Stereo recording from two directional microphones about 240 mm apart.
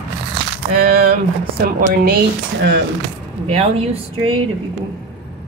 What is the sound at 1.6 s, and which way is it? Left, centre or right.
Speech, right.